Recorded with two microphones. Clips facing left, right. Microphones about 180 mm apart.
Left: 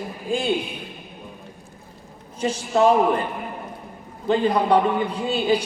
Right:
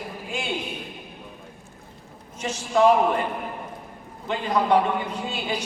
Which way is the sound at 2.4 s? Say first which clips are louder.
Left 2 dB; 35° left (ahead or behind).